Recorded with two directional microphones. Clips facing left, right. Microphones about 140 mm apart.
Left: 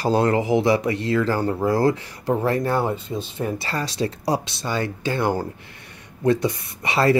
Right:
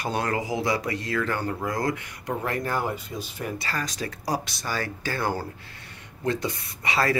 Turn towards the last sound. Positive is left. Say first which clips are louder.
# left 6 dB
turn(degrees=25)  # may be behind; listen again after turning